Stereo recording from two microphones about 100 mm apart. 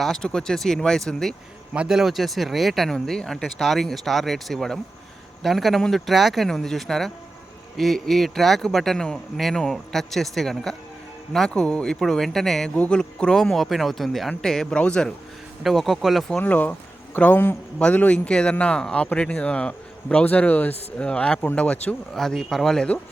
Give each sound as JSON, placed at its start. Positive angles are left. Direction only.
{"t": 0.0, "sound": "speech", "side_deg": 5}
{"t": 1.7, "sound": "speech", "side_deg": -10}
{"t": 16.4, "sound": "a man's voice", "side_deg": 15}